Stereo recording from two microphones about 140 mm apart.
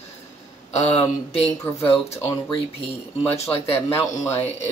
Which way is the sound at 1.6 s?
15° left (ahead or behind).